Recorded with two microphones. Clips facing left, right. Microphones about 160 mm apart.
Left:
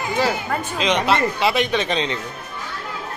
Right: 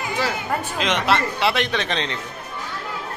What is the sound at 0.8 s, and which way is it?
Speech, centre (ahead or behind).